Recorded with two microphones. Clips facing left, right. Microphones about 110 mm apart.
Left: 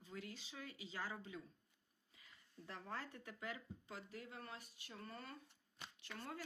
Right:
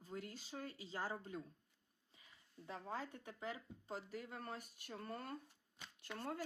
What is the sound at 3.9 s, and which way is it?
Speech, 45° right (ahead or behind).